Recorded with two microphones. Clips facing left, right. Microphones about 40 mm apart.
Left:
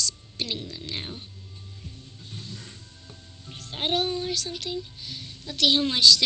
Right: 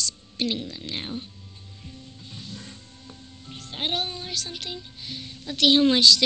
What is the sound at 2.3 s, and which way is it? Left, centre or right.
Music, right.